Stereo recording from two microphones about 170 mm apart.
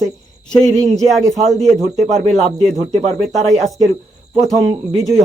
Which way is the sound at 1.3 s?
40° right (ahead or behind).